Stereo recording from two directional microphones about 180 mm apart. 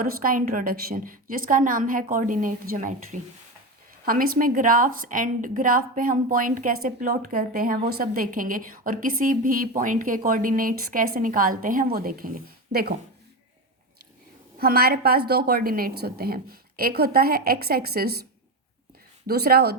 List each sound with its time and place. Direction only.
0.0 s a woman's voice: 50° right (ahead or behind)
14.6 s a woman's voice: 60° right (ahead or behind)
19.3 s a woman's voice: 60° right (ahead or behind)